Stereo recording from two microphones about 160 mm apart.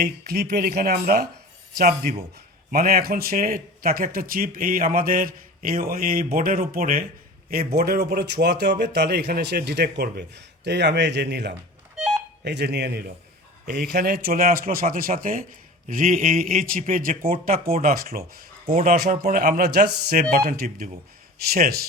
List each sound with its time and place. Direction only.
0.0 s speech: 80° right; by 7.0 s 60° right (ahead or behind)
7.5 s speech: 75° right (ahead or behind); by 11.5 s 90° right
11.9 s a sound: 5° right (ahead or behind)
12.5 s speech: 90° right; by 18.3 s 70° right (ahead or behind)
18.6 s speech: 40° right (ahead or behind)
18.9 s speech: 65° right (ahead or behind)